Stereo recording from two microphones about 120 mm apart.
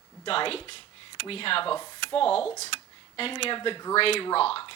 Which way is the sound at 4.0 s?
55° left (ahead or behind).